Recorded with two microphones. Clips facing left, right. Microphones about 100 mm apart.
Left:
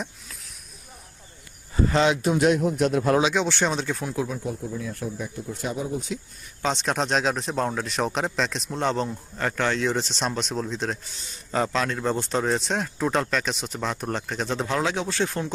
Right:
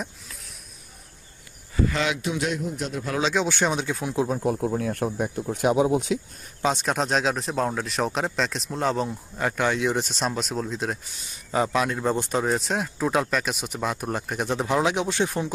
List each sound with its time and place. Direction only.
0.0 s a sound: centre (ahead or behind)
1.7 s speech: 30° left (ahead or behind)
2.5 s speech: 65° left (ahead or behind)
3.3 s speech: 5° right (ahead or behind)
4.4 s speech: 60° right (ahead or behind); by 6.1 s 80° right
6.6 s speech: 5° right (ahead or behind)